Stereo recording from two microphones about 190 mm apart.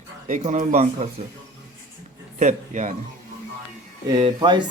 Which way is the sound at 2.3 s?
40° right (ahead or behind).